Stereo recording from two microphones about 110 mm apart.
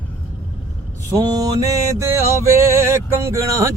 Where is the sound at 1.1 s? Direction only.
35° right (ahead or behind).